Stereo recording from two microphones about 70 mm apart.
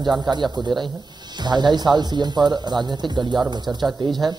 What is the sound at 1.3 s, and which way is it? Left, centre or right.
Speech, right.